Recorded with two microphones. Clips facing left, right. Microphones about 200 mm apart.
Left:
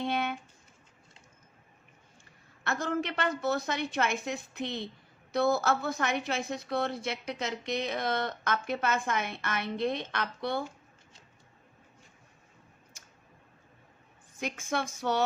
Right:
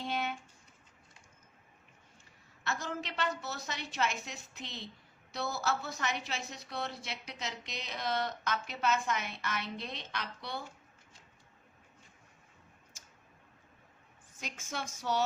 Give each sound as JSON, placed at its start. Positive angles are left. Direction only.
{"t": 0.0, "sound": "a sound", "side_deg": 60}
{"t": 2.6, "sound": "a woman's voice", "side_deg": 55}
{"t": 12.9, "sound": "clicking", "side_deg": 60}
{"t": 14.3, "sound": "a woman's voice", "side_deg": 60}